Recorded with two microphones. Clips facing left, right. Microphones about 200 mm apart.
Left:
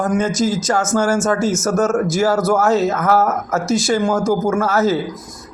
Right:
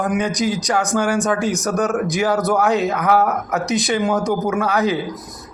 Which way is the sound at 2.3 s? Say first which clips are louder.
Left 2 dB; centre (ahead or behind).